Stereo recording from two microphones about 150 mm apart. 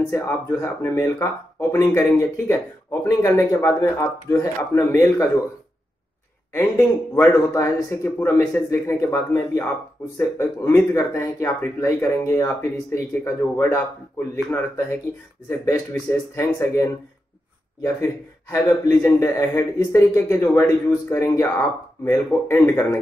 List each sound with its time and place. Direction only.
0.1 s speech: 15° left (ahead or behind)
6.6 s speech: 15° left (ahead or behind)
15.4 s speech: 20° left (ahead or behind)
18.0 s speech: 20° left (ahead or behind)